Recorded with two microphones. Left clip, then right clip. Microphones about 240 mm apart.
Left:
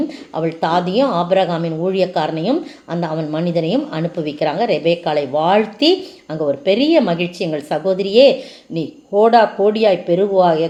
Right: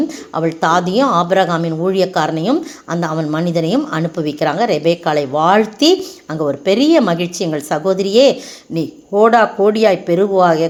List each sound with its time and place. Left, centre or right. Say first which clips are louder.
0.3 s a woman's voice: right 3 dB; right